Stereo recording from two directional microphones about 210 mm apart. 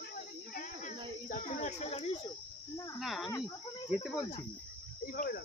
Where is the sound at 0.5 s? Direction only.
40° left (ahead or behind).